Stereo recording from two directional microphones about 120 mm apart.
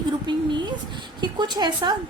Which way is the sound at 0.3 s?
40° right (ahead or behind).